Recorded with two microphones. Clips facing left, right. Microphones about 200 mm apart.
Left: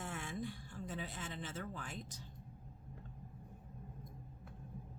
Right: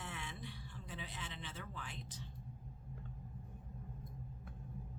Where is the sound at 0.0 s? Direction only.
45° left (ahead or behind).